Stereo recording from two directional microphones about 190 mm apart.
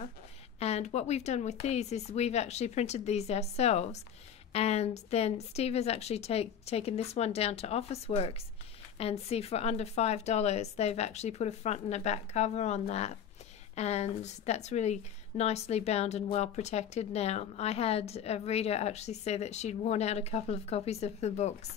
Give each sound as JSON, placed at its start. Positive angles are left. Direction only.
{"t": 0.6, "sound": "a woman's voice", "side_deg": 35}